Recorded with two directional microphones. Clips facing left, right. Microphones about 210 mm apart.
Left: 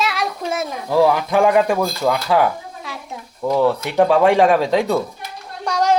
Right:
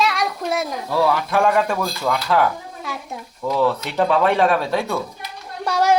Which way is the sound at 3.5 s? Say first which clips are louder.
Left 4 dB; 15° left (ahead or behind).